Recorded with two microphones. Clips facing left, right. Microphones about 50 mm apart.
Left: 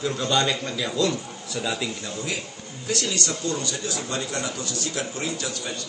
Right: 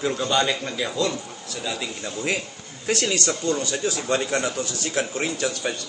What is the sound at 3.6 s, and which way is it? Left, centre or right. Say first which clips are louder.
Speech: right 5 dB; right.